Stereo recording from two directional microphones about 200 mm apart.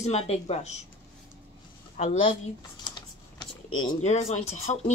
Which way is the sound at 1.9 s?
35° left (ahead or behind).